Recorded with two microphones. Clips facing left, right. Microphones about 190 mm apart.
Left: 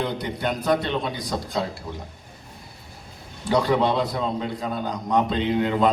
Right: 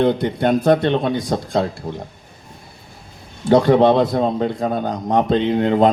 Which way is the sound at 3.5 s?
50° right (ahead or behind).